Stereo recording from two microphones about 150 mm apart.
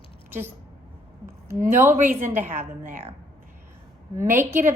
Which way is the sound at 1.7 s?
15° right (ahead or behind).